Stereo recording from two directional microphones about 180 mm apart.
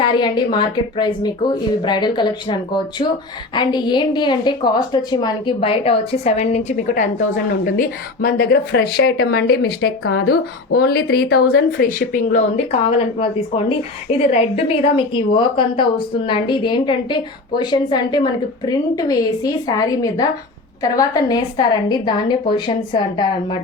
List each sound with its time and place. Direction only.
0.0 s a woman's voice: 25° left (ahead or behind)